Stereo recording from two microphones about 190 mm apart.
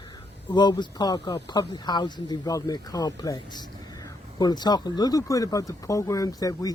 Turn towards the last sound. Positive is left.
turn(degrees=20)  # may be behind; listen again after turning